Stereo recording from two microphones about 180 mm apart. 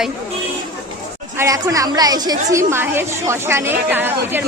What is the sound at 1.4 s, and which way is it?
A woman's voice, 15° right (ahead or behind).